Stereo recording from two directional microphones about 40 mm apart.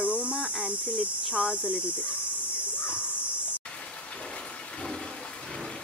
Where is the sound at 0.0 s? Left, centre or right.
Right.